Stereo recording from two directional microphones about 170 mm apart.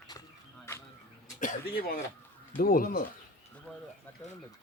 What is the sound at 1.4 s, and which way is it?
A man's voice, 60° left (ahead or behind).